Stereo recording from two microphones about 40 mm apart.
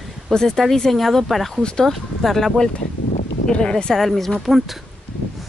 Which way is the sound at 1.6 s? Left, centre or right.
Left.